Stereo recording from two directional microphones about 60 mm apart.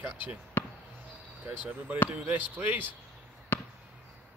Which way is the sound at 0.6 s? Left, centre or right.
Left.